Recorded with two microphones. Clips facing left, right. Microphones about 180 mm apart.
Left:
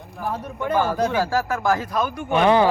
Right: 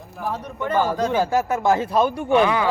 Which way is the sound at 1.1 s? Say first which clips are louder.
Right 2 dB; 20° right (ahead or behind).